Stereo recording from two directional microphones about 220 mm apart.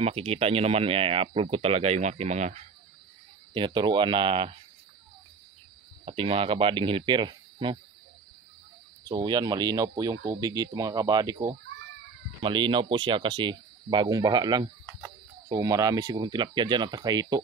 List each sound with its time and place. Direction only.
0.0 s speech: 25° right (ahead or behind)
3.5 s speech: 20° right (ahead or behind)
6.0 s speech: 25° right (ahead or behind)
9.0 s speech: 20° right (ahead or behind)